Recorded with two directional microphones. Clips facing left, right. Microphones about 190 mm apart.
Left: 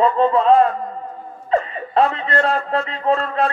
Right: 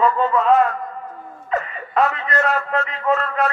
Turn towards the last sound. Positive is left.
turn(degrees=30)  # may be behind; listen again after turning